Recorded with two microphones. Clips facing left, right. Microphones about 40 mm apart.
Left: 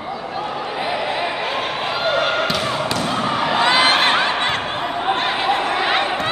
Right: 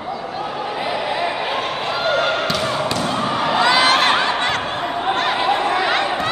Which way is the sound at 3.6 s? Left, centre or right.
Left.